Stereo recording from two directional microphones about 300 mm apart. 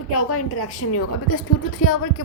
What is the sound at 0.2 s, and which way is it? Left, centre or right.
Speech, left.